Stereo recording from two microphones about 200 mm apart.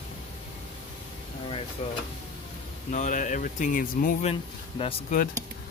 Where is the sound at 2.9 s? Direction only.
40° left (ahead or behind).